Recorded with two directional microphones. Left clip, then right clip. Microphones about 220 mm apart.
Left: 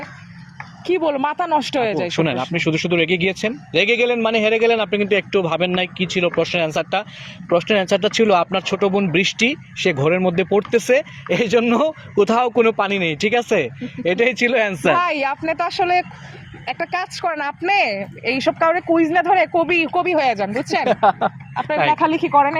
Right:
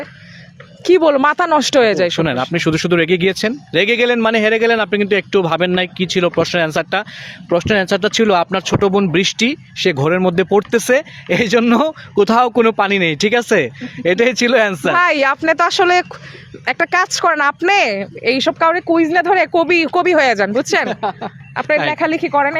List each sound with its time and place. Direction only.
0.9 s speech: 50° right (ahead or behind)
2.0 s speech: 35° right (ahead or behind)
20.8 s speech: centre (ahead or behind)
21.5 s speech: 50° right (ahead or behind)
21.9 s speech: 30° right (ahead or behind)